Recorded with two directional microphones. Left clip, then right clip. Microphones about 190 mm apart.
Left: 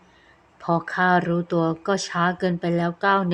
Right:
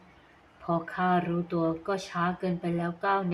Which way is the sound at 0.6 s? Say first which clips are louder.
Left 7 dB; 45° left (ahead or behind).